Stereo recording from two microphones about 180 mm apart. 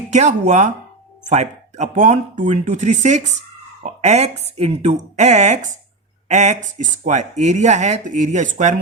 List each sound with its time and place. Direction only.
0.1 s speech: 40° right (ahead or behind)